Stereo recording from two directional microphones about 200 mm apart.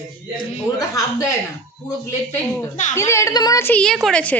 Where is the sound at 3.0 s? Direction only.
15° left (ahead or behind).